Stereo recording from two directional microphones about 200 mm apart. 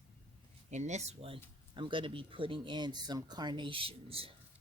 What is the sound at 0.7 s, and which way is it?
Speech, 35° right (ahead or behind).